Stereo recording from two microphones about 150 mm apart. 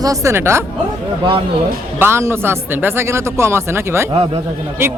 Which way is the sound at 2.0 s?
15° right (ahead or behind).